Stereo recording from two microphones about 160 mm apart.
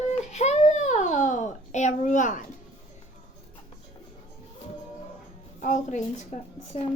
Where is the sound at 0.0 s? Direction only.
45° left (ahead or behind).